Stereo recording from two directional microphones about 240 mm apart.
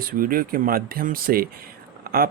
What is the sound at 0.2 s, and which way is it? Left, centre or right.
Speech, right.